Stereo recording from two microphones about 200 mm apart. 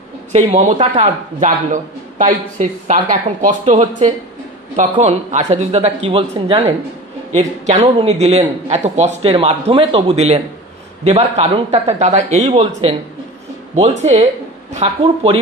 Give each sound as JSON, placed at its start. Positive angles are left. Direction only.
{"t": 0.3, "sound": "a man's voice", "side_deg": -35}